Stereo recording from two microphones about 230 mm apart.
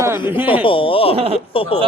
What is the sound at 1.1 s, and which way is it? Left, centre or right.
Speech, right.